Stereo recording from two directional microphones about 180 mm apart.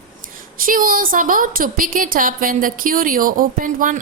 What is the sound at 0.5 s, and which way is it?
A woman's voice, 50° right (ahead or behind).